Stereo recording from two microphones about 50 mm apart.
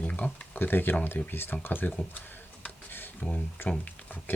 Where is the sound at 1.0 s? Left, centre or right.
Left.